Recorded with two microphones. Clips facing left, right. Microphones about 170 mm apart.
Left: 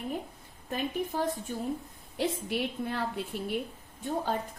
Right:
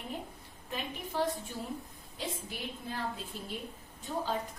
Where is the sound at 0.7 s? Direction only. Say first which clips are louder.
Left 6 dB; 50° left (ahead or behind).